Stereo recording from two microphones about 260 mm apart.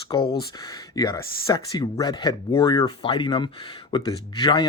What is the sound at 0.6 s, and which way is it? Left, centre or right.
Speech, centre.